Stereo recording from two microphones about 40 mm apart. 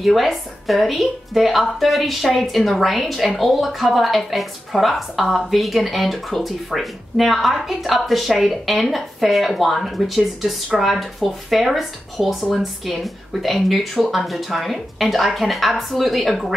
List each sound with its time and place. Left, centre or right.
0.0 s a woman's voice: centre